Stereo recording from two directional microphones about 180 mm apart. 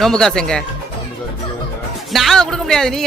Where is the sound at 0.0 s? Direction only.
5° left (ahead or behind).